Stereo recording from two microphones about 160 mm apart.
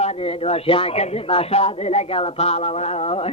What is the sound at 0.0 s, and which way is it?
A man's voice, 40° left (ahead or behind).